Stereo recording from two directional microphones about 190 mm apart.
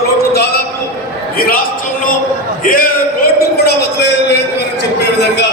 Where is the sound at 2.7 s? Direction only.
50° left (ahead or behind).